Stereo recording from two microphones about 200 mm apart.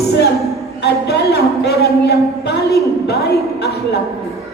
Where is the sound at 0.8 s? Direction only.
55° left (ahead or behind).